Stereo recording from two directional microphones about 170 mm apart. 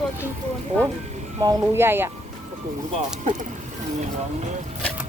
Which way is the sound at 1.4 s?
20° right (ahead or behind).